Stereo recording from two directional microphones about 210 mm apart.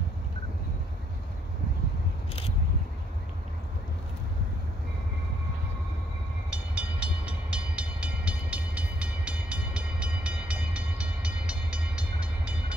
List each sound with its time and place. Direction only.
6.5 s train: 5° right (ahead or behind)